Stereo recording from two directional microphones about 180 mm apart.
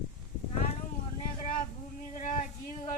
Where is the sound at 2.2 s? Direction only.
45° left (ahead or behind).